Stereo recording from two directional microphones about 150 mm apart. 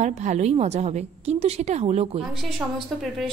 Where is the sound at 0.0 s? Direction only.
50° right (ahead or behind).